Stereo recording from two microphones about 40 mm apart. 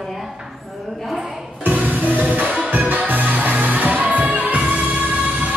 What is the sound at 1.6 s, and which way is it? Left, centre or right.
Music, right.